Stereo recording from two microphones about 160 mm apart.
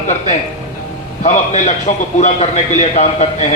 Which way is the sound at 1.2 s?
45° left (ahead or behind).